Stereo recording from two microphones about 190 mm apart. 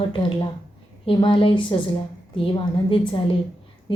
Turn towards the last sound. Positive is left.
turn(degrees=25)  # may be behind; listen again after turning